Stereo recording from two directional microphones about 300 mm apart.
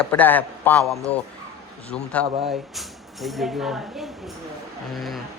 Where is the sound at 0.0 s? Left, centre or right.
Centre.